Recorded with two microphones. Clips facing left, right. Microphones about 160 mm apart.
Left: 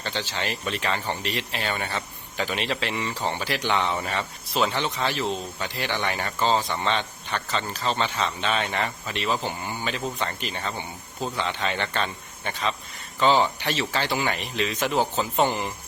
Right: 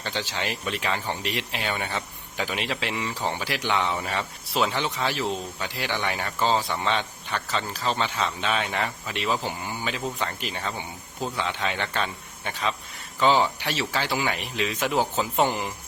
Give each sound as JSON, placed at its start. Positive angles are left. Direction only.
{"t": 0.0, "sound": "speech", "side_deg": -15}